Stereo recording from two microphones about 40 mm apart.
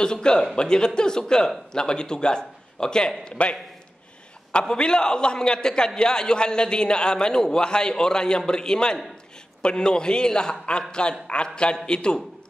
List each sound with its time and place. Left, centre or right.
0.0 s a man's voice: left
4.5 s a man's voice: left